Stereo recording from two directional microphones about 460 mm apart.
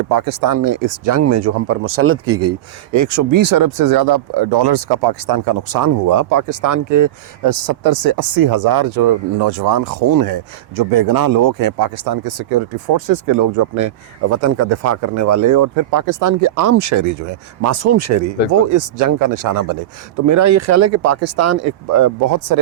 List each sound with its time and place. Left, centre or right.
0.1 s speech: right
2.9 s speech: right